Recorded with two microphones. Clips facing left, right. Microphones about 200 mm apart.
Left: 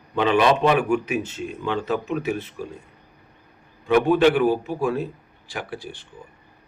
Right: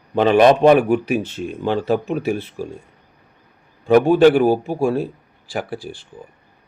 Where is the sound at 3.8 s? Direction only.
35° right (ahead or behind).